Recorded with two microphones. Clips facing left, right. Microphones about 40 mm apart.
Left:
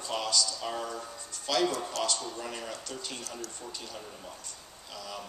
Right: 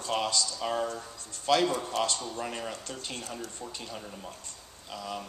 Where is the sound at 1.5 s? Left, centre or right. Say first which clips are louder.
Right 3 dB; right.